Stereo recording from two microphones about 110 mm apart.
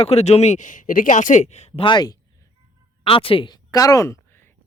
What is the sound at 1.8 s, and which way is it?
Speech, 40° left (ahead or behind).